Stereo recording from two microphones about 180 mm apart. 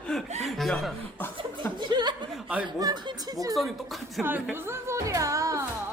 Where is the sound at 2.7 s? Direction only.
20° right (ahead or behind).